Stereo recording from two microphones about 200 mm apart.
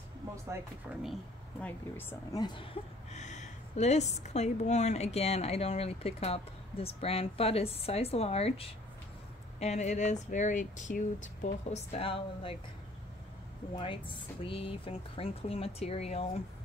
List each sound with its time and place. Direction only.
1.6 s speech: 10° left (ahead or behind); by 12.5 s 25° left (ahead or behind)
13.7 s speech: 25° left (ahead or behind)